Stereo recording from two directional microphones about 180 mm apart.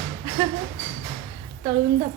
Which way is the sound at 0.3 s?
30° right (ahead or behind).